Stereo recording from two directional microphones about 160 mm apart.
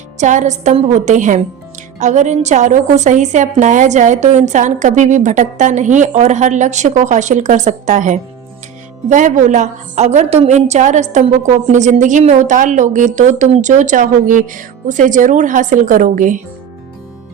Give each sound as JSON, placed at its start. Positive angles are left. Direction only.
{"t": 0.2, "sound": "a woman's voice", "side_deg": -50}